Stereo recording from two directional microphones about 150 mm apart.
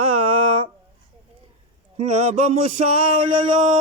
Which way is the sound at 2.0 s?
50° right (ahead or behind).